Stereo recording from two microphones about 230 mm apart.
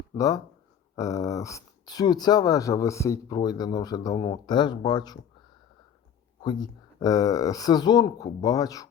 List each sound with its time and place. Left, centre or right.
0.2 s speech: centre
6.4 s speech: centre